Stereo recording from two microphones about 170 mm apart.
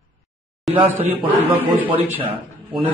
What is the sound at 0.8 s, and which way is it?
Speech, 10° right (ahead or behind).